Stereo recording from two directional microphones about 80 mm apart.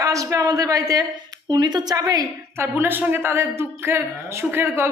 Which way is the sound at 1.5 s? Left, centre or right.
Right.